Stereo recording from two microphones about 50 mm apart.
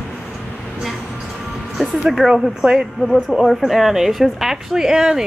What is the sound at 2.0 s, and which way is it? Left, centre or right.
A woman's voice, centre.